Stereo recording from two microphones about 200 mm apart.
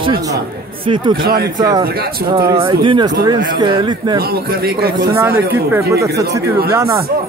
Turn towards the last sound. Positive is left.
turn(degrees=-15)  # may be behind; listen again after turning